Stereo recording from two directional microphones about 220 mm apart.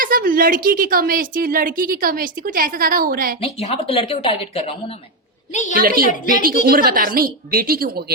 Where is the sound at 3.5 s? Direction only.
25° left (ahead or behind).